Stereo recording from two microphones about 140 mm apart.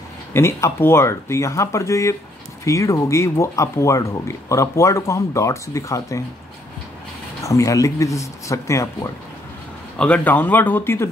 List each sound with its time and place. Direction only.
0.3 s speech: 20° left (ahead or behind)
7.4 s speech: 25° left (ahead or behind)
9.9 s speech: 10° left (ahead or behind)